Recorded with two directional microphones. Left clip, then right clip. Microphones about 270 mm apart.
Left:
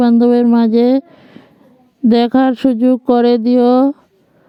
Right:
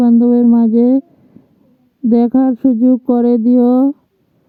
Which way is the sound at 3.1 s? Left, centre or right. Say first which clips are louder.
Left 1 dB; centre.